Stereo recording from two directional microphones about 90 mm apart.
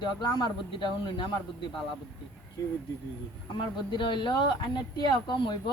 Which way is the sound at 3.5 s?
60° left (ahead or behind).